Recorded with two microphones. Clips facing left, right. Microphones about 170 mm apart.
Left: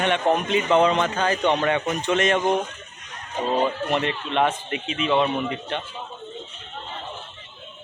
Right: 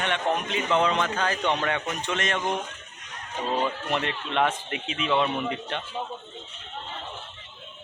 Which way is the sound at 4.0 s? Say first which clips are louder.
Left 2 dB; centre (ahead or behind).